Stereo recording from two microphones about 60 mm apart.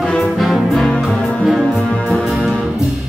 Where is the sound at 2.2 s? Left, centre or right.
Centre.